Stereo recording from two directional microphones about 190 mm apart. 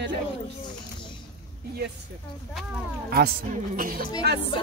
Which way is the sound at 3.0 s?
55° right (ahead or behind).